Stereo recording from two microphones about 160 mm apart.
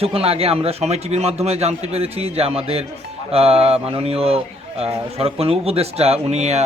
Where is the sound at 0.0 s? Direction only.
35° right (ahead or behind).